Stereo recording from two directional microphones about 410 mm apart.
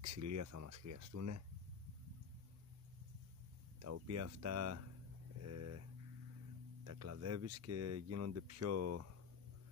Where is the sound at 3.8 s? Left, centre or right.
Right.